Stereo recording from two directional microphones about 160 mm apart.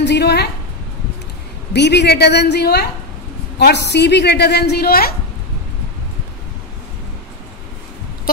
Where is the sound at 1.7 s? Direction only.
90° left; by 5.1 s 70° left (ahead or behind).